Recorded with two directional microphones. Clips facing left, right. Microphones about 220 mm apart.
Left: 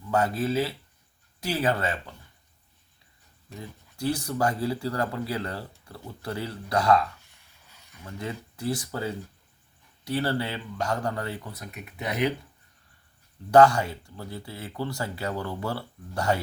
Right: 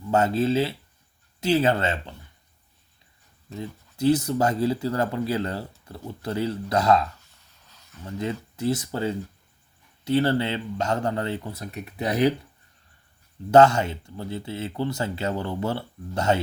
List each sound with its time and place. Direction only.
0.1 s speech: 25° right (ahead or behind)
3.6 s speech: 20° right (ahead or behind)
7.3 s a sound: 10° left (ahead or behind)
8.0 s speech: 25° right (ahead or behind)
13.5 s speech: 25° right (ahead or behind)